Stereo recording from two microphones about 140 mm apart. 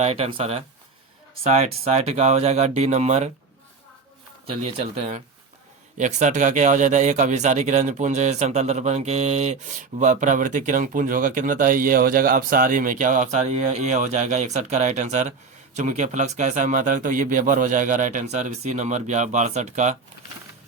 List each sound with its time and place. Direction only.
0.0 s speech: 45° right (ahead or behind)
6.0 s speech: 60° right (ahead or behind)